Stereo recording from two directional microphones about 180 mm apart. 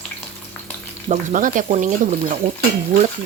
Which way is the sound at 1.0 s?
45° right (ahead or behind).